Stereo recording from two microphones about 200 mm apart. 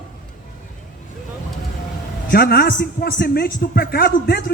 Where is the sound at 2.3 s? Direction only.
50° left (ahead or behind).